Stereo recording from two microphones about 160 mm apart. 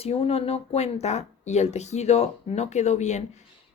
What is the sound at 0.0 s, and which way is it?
Speech, 40° left (ahead or behind).